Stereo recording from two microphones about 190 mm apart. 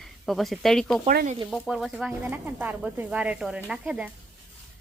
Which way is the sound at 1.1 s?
45° right (ahead or behind).